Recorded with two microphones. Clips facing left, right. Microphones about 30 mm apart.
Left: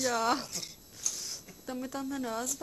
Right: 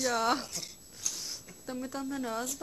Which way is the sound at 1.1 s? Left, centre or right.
Centre.